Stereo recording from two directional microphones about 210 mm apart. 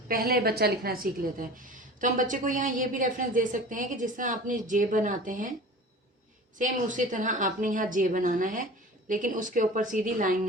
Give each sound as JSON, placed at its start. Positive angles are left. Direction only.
{"t": 0.1, "sound": "a woman's voice", "side_deg": -45}
{"t": 6.6, "sound": "a woman's voice", "side_deg": -40}